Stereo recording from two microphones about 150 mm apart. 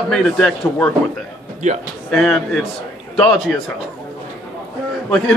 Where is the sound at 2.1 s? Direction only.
5° left (ahead or behind).